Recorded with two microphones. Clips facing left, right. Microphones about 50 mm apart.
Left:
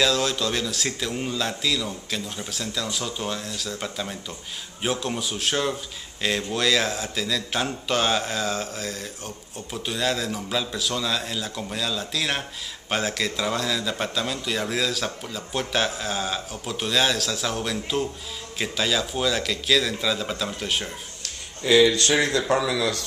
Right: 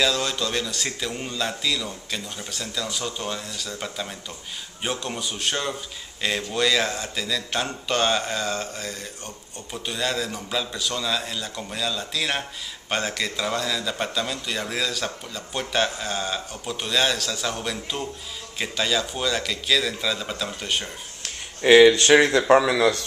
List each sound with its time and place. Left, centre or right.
0.0 s speech: centre
21.2 s a sound: right
21.9 s speech: right